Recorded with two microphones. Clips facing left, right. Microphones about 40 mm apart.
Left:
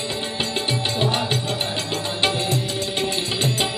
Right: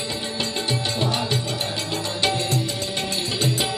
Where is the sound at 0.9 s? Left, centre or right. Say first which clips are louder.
Left 3 dB; left.